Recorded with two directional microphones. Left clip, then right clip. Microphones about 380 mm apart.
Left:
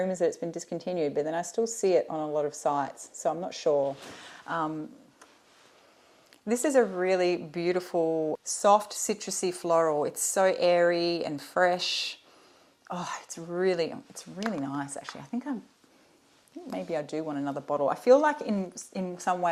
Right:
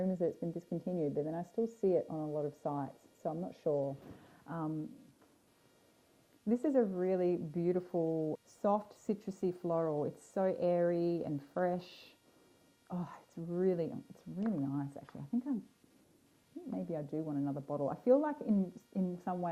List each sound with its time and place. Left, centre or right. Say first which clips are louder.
0.0 s speech: left 8 dB; centre
6.4 s speech: left 8 dB; centre
7.9 s speech: left 8 dB; centre
8.4 s speech: left 14 dB; centre
16.6 s speech: left 9 dB; centre